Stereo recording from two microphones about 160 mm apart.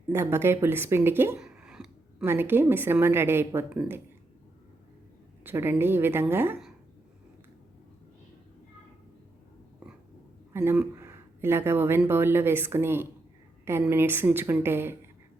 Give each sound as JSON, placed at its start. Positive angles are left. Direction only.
{"t": 0.1, "sound": "a woman's voice", "side_deg": -15}
{"t": 1.4, "sound": "a sound", "side_deg": -5}
{"t": 2.2, "sound": "a woman's voice", "side_deg": -15}
{"t": 5.4, "sound": "a woman's voice", "side_deg": -15}
{"t": 10.5, "sound": "a woman's voice", "side_deg": -15}